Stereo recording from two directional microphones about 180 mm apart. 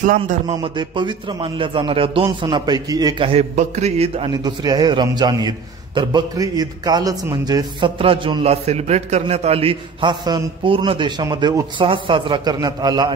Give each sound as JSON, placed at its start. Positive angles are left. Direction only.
{"t": 0.0, "sound": "a man's voice", "side_deg": -45}
{"t": 0.5, "sound": "a man's voice", "side_deg": -25}
{"t": 4.3, "sound": "a man's voice", "side_deg": -20}